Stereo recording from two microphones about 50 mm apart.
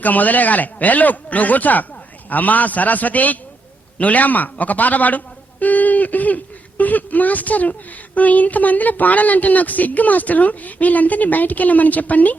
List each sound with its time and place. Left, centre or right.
0.0 s speech: left